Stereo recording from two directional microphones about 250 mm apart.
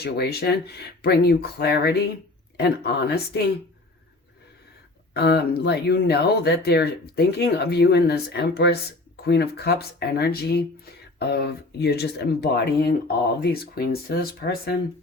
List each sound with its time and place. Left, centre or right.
0.0 s speech: left
5.1 s speech: left